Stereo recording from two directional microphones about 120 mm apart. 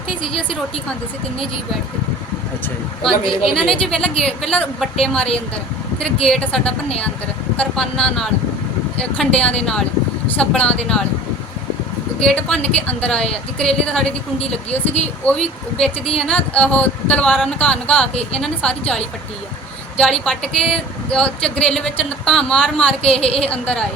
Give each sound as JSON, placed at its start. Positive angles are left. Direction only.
{"t": 3.4, "sound": "a woman's voice", "side_deg": 5}
{"t": 12.2, "sound": "speech", "side_deg": 5}
{"t": 15.2, "sound": "speech", "side_deg": 10}
{"t": 17.2, "sound": "a woman's voice", "side_deg": 0}
{"t": 17.6, "sound": "speech", "side_deg": 10}
{"t": 18.1, "sound": "speech", "side_deg": 55}
{"t": 18.3, "sound": "speech", "side_deg": 5}
{"t": 20.0, "sound": "a woman's voice", "side_deg": 5}
{"t": 23.2, "sound": "speech", "side_deg": 55}
{"t": 23.5, "sound": "speech", "side_deg": 10}